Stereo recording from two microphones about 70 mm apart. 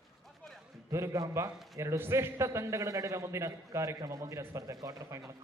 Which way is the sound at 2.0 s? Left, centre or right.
Right.